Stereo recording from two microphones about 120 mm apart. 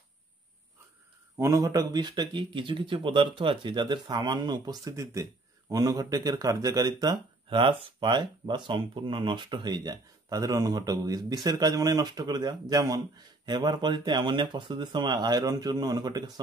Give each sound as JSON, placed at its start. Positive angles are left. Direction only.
{"t": 1.3, "sound": "speech", "side_deg": -25}
{"t": 7.4, "sound": "speech", "side_deg": -45}